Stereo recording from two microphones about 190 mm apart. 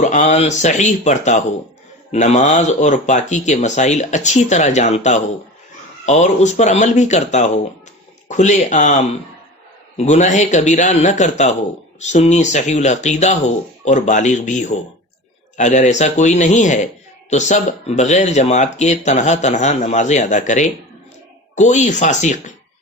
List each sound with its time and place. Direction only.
0.0 s a man's voice: 40° left (ahead or behind)
10.0 s a man's voice: 40° left (ahead or behind)